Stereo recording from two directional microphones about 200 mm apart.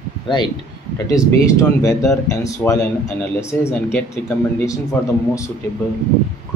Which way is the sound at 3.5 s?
10° left (ahead or behind).